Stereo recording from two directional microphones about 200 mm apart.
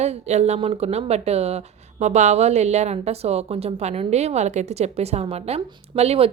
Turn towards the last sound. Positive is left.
turn(degrees=-30)  # may be behind; listen again after turning